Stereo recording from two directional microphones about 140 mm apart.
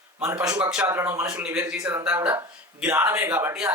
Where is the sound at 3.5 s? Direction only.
5° right (ahead or behind).